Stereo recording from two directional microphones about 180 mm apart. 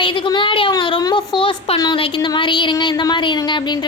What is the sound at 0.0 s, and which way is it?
A woman's voice, 30° left (ahead or behind).